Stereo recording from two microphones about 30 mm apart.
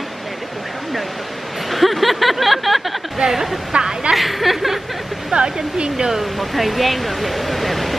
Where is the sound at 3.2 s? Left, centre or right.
Centre.